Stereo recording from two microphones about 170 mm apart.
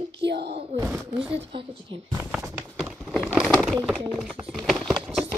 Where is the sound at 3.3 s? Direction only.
Centre (ahead or behind).